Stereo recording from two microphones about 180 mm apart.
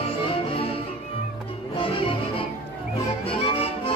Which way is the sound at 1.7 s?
30° left (ahead or behind).